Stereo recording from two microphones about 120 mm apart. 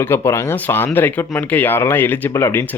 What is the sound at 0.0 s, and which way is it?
Speech, 20° left (ahead or behind).